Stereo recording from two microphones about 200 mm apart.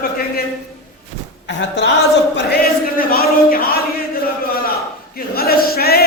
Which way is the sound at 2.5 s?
50° left (ahead or behind).